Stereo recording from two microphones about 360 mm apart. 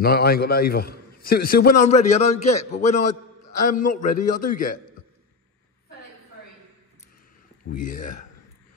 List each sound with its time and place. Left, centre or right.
0.0 s a man's voice: left
7.6 s a man's voice: left